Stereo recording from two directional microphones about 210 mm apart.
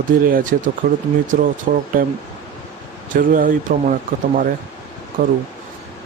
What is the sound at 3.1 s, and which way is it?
Speech, 40° right (ahead or behind).